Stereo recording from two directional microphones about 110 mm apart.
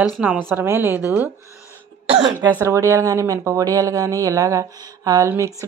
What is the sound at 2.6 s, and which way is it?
A woman's voice, 25° right (ahead or behind).